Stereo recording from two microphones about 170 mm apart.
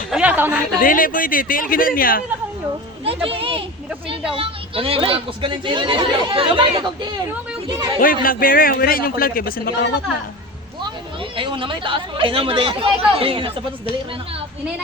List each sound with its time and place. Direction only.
0.1 s a sound: 10° right (ahead or behind)
0.8 s a man's voice: 55° left (ahead or behind)
3.0 s speech: 35° right (ahead or behind)
8.0 s a man's voice: 55° left (ahead or behind)
11.3 s speech: 30° right (ahead or behind)